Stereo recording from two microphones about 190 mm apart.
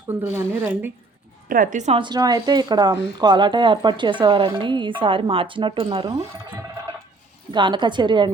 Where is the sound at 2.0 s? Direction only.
20° right (ahead or behind).